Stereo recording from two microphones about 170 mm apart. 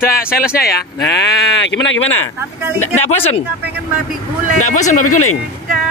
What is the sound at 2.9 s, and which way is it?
Speech, 40° left (ahead or behind).